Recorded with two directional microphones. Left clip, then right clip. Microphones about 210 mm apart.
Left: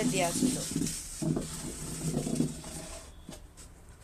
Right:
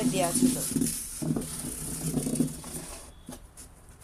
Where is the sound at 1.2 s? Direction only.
50° right (ahead or behind).